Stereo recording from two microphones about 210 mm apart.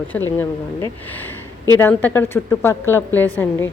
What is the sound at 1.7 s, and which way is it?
A woman's voice, 10° left (ahead or behind).